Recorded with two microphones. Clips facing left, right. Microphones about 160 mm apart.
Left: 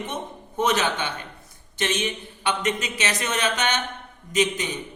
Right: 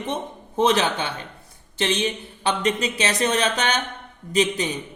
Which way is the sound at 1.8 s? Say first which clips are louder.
Right 3 dB; 30° right (ahead or behind).